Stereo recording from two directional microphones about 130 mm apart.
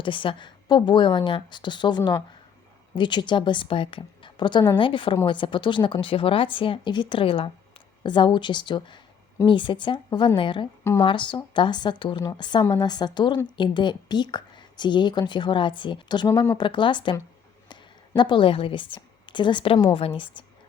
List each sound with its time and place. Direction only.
0.0 s speech: 40° left (ahead or behind)
18.2 s speech: 40° left (ahead or behind)